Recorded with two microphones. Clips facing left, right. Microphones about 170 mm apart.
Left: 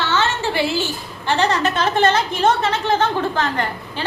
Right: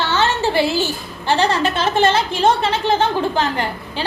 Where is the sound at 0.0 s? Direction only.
35° right (ahead or behind).